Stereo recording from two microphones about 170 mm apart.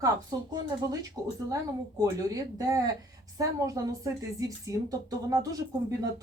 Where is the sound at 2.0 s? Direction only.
20° right (ahead or behind).